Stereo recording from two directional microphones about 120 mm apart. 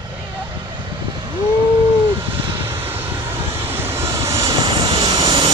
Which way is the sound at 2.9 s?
20° right (ahead or behind).